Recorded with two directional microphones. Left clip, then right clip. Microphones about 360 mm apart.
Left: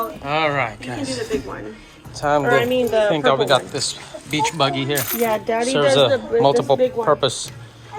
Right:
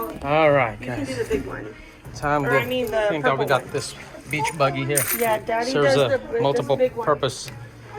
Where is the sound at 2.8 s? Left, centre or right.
Left.